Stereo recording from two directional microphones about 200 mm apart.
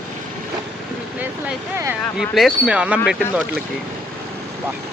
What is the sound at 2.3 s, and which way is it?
Speech, centre (ahead or behind).